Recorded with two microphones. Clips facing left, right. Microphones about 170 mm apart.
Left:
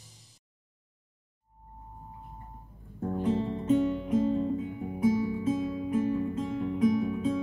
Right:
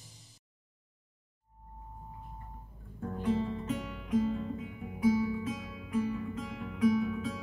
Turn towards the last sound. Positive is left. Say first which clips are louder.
# left 4 dB
turn(degrees=25)  # may be behind; listen again after turning